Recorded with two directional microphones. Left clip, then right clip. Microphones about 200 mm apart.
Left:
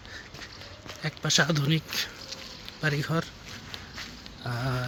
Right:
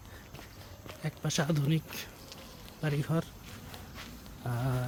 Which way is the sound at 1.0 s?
10° right (ahead or behind).